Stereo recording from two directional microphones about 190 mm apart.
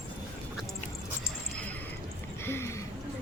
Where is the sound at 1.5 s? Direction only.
10° left (ahead or behind).